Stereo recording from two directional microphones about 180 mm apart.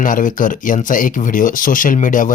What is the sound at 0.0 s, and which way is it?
Speech, 45° left (ahead or behind).